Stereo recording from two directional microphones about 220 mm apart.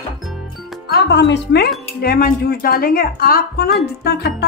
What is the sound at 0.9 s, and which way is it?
A woman's voice, 50° left (ahead or behind).